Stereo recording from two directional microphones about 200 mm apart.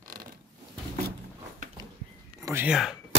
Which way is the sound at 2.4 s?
10° right (ahead or behind).